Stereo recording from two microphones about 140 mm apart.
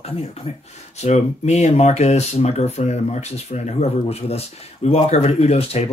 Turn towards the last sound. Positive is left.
turn(degrees=45)  # may be behind; listen again after turning